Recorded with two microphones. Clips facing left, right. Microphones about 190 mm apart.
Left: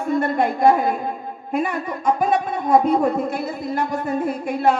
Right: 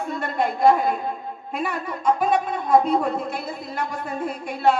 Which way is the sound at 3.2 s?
50° left (ahead or behind).